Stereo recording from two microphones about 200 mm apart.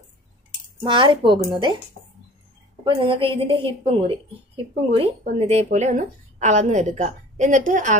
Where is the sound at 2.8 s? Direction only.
25° right (ahead or behind).